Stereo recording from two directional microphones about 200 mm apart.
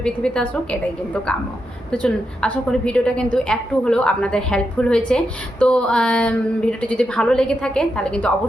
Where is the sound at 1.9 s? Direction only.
5° left (ahead or behind).